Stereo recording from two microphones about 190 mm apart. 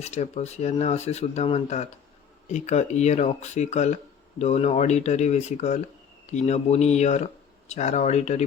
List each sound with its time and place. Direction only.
0.0 s speech: 35° left (ahead or behind)